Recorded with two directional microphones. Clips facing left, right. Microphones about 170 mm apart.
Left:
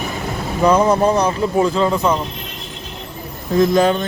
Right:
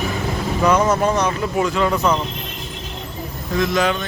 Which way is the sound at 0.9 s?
30° left (ahead or behind).